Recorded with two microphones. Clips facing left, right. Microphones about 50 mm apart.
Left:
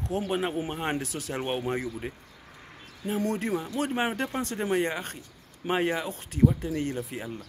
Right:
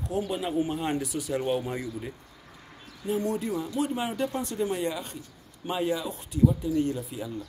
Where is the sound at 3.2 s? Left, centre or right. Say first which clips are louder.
Left 2 dB; left.